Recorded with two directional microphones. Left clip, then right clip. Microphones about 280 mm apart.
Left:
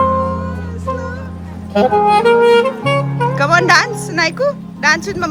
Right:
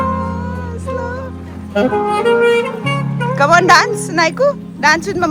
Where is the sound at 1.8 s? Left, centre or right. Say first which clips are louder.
Left 4 dB; left.